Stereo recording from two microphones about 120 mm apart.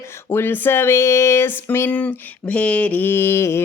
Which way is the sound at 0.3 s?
20° left (ahead or behind).